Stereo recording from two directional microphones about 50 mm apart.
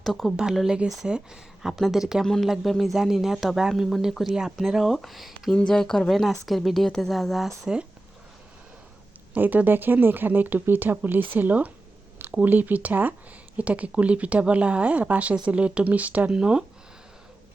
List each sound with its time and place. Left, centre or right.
0.0 s speech: centre
2.2 s speech: centre
2.5 s speech: centre
5.5 s speech: centre
9.4 s speech: right
16.3 s speech: centre